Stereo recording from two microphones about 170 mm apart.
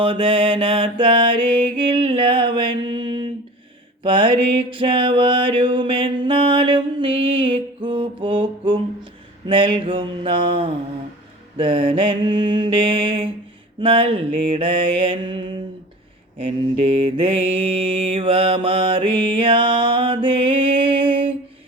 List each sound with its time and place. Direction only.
0.0 s mantra: 30° right (ahead or behind)